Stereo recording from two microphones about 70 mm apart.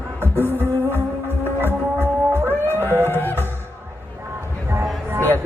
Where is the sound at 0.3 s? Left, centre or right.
Right.